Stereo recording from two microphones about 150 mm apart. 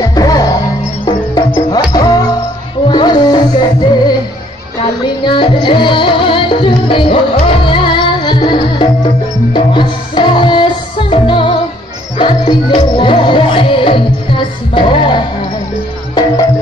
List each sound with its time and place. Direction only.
0.0 s music: 25° left (ahead or behind)
5.2 s music: 30° left (ahead or behind)